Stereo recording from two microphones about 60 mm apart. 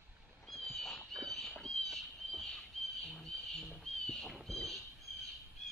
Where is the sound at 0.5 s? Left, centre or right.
Centre.